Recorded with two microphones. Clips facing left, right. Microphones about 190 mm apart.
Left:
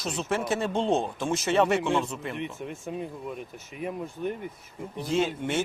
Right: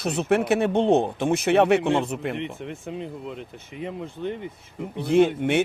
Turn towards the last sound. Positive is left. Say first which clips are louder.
# right 7 dB
turn(degrees=-60)  # may be behind; listen again after turning